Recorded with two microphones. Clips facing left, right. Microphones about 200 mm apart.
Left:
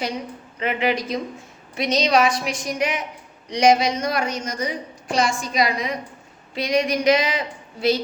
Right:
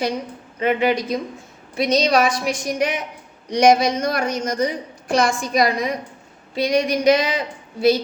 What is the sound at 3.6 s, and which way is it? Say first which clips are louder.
A woman's voice: right 2 dB; 50° right (ahead or behind).